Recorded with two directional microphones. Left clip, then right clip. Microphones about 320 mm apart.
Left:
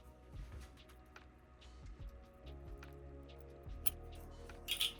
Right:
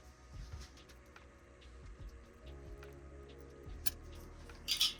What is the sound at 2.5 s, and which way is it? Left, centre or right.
Music, centre.